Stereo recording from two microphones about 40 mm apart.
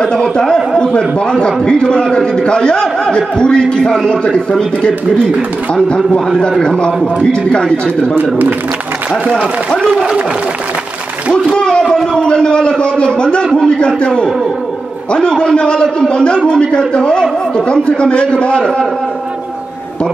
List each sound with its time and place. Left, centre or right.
0.0 s a man's voice: left
11.5 s a sound: left
11.9 s a man's voice: centre